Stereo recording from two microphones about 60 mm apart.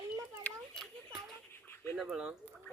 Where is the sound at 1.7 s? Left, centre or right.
Left.